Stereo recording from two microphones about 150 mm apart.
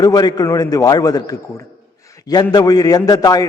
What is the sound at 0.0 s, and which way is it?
A man's voice, 25° left (ahead or behind).